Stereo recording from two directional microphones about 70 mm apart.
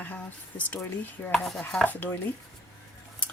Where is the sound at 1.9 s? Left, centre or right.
Left.